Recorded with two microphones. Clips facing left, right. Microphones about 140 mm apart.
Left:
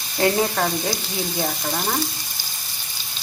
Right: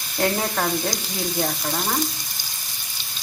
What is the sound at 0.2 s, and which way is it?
Speech, 5° left (ahead or behind).